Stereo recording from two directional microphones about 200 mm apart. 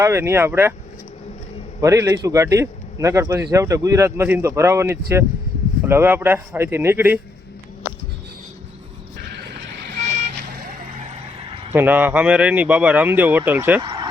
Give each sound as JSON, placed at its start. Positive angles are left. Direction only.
{"t": 0.0, "sound": "a man's voice", "side_deg": -15}
{"t": 1.8, "sound": "a man's voice", "side_deg": -15}
{"t": 11.7, "sound": "a man's voice", "side_deg": -10}
{"t": 13.8, "sound": "a sound", "side_deg": -20}